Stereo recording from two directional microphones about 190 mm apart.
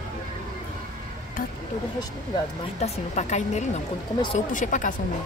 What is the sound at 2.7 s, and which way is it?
A woman's voice, 35° left (ahead or behind).